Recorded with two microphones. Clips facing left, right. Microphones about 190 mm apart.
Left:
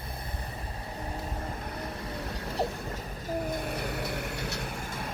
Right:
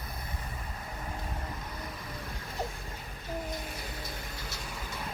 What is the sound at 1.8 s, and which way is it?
Vehicle, 70° left (ahead or behind).